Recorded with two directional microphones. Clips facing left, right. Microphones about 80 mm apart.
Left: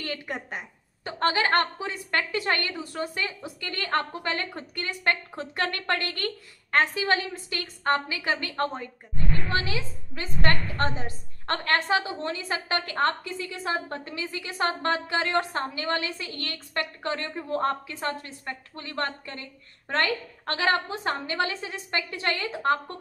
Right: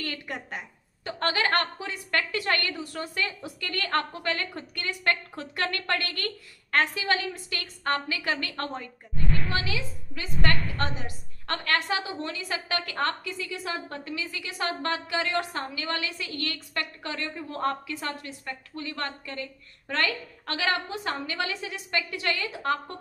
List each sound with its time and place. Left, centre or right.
0.0 s a woman's voice: left
9.5 s a woman's voice: left